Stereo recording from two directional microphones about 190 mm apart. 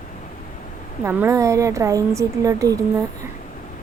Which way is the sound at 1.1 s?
10° right (ahead or behind).